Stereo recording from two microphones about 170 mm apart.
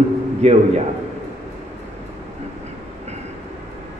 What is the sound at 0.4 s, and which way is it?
Speech, 40° right (ahead or behind).